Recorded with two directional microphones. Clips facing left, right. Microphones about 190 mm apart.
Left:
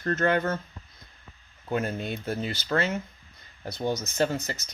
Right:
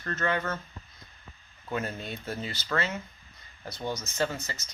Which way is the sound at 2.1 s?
50° left (ahead or behind).